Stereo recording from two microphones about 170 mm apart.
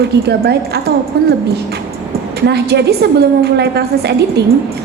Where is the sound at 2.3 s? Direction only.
70° right (ahead or behind).